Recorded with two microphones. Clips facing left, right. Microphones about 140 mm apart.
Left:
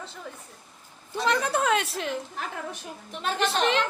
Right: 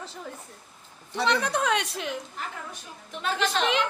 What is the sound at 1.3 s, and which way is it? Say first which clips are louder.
Speech: left 2 dB; 5° left (ahead or behind).